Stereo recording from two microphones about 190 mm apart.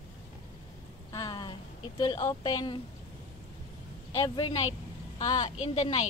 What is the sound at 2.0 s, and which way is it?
Speech, 20° left (ahead or behind).